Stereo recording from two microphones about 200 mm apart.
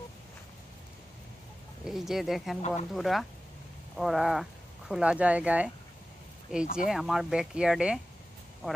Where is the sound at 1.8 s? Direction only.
Centre (ahead or behind).